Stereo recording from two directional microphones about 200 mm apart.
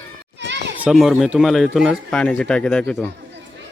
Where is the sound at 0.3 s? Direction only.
60° right (ahead or behind).